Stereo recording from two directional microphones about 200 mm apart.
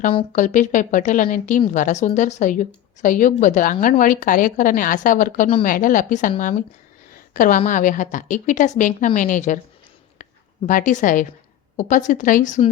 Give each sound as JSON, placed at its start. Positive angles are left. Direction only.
{"t": 0.3, "sound": "a woman's voice", "side_deg": 40}
{"t": 10.2, "sound": "a sound", "side_deg": 40}
{"t": 10.7, "sound": "a woman's voice", "side_deg": 40}